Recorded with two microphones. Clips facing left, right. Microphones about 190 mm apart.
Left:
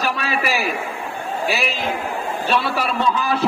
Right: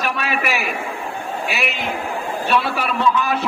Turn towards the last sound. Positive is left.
turn(degrees=35)  # may be behind; listen again after turning